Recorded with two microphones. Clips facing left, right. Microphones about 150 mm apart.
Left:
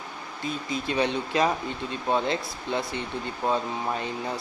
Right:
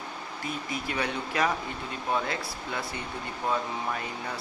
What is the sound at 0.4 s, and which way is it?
Speech, 25° left (ahead or behind).